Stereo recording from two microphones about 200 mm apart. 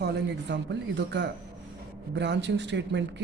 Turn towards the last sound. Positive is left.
turn(degrees=-60)  # may be behind; listen again after turning